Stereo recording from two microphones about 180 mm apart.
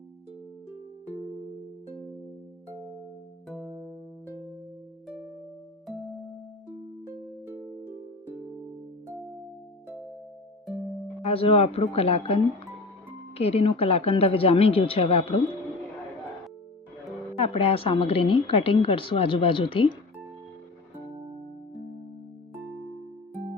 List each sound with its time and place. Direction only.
3.5 s music: 5° right (ahead or behind)
7.1 s music: 15° right (ahead or behind)
11.2 s a woman's voice: 35° left (ahead or behind)
17.3 s a woman's voice: 30° left (ahead or behind)